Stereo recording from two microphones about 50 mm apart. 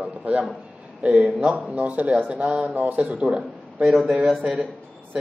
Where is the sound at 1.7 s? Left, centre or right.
Right; by 4.0 s centre.